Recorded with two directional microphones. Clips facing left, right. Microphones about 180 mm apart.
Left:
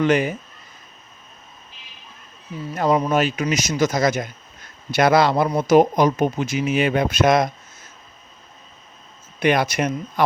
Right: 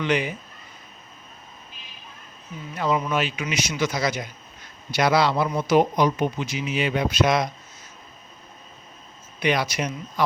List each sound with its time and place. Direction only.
0.0 s speech: 45° left (ahead or behind)
2.7 s speech: 40° left (ahead or behind)
9.4 s speech: 50° left (ahead or behind)